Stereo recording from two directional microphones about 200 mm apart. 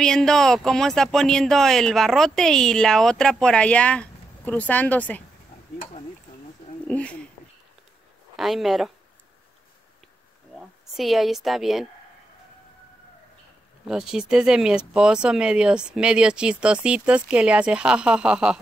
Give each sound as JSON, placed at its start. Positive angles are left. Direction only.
{"t": 0.0, "sound": "speech", "side_deg": 0}
{"t": 6.9, "sound": "speech", "side_deg": 5}
{"t": 8.4, "sound": "speech", "side_deg": 0}
{"t": 10.5, "sound": "speech", "side_deg": 0}
{"t": 13.8, "sound": "speech", "side_deg": -5}